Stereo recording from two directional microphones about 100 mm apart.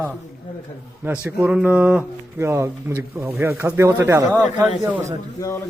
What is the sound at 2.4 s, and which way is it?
Speech, 30° right (ahead or behind).